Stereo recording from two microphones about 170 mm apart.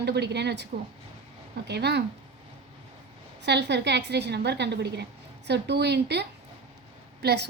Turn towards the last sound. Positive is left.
turn(degrees=-75)  # may be behind; listen again after turning